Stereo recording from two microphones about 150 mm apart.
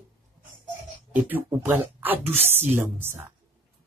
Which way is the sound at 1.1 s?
10° right (ahead or behind).